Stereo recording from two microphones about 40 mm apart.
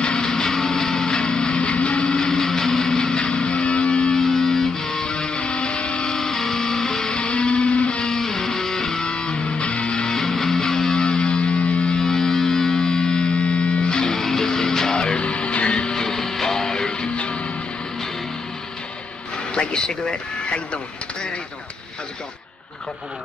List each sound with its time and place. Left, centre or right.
0.0 s music: left
2.1 s music: centre
4.2 s music: centre
5.1 s music: left
6.1 s music: centre
7.2 s music: left
8.0 s music: centre
10.1 s music: centre
11.0 s music: left
12.0 s music: centre
16.0 s music: centre; by 17.5 s left
19.5 s a sound: left